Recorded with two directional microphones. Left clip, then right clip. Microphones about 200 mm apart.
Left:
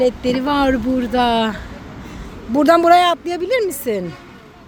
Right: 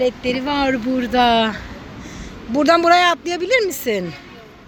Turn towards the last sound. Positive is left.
turn(degrees=10)  # may be behind; listen again after turning